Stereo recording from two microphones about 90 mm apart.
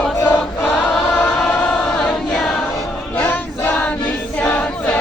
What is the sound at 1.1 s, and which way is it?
Choir, 10° left (ahead or behind).